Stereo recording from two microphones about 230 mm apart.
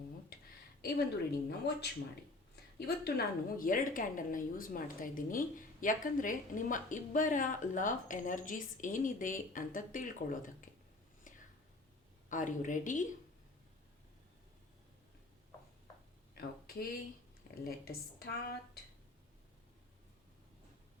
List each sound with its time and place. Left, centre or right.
0.8 s a woman's voice: left
12.3 s a woman's voice: left
16.4 s speech: left
17.6 s a woman's voice: left